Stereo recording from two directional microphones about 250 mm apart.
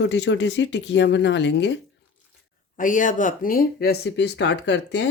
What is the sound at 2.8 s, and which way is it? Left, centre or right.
Speech, left.